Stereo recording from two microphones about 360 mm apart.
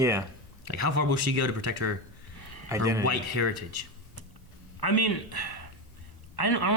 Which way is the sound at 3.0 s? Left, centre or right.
Right.